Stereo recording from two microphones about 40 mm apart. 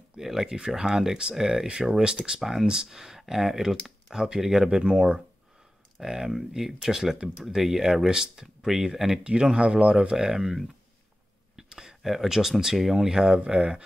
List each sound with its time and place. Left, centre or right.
0.2 s speech: centre
9.2 s speech: right
10.1 s speech: centre